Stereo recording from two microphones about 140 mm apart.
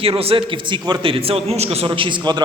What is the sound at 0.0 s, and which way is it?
A man's voice, 45° right (ahead or behind).